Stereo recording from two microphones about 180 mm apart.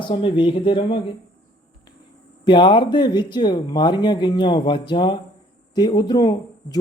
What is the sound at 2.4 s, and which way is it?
Speech, 25° left (ahead or behind).